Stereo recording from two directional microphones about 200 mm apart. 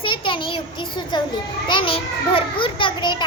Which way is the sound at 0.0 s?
25° left (ahead or behind).